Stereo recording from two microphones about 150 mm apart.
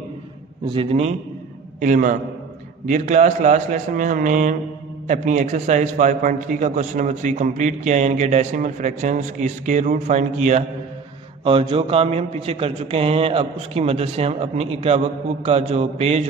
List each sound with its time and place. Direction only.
0.7 s a man's voice: 40° right (ahead or behind)
1.8 s a man's voice: 60° right (ahead or behind)
11.4 s a man's voice: 35° right (ahead or behind)